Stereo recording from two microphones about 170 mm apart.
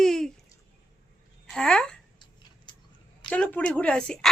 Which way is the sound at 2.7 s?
25° left (ahead or behind).